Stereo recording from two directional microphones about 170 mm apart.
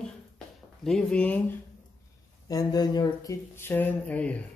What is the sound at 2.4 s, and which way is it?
Speech, 20° left (ahead or behind).